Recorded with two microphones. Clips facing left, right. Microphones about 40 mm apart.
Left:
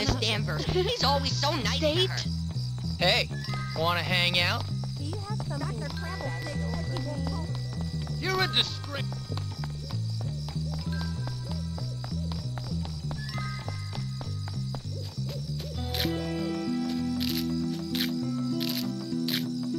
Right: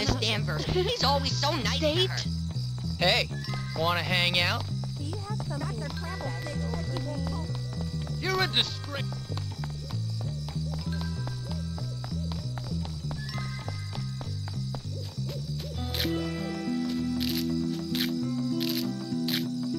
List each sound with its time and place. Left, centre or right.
0.0 s speech: centre
8.2 s music: centre
15.5 s music: centre
16.5 s music: centre
17.2 s music: centre